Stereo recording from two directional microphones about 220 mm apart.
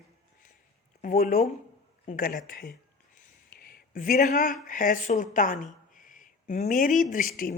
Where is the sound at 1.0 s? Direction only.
40° left (ahead or behind).